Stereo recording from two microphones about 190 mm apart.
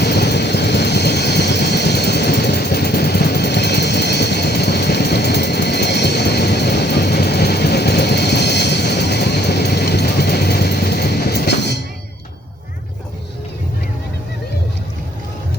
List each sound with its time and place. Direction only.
0.0 s vehicle: 60° left (ahead or behind)